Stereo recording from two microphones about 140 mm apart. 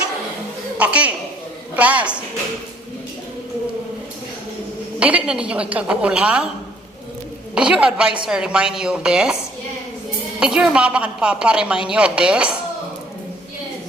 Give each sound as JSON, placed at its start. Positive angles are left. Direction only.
{"t": 0.8, "sound": "speech", "side_deg": -10}
{"t": 4.9, "sound": "speech", "side_deg": -10}
{"t": 7.5, "sound": "a woman's voice", "side_deg": -5}
{"t": 10.4, "sound": "speech", "side_deg": -5}